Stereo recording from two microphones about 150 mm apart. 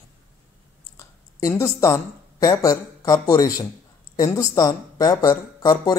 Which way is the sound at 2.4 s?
25° left (ahead or behind).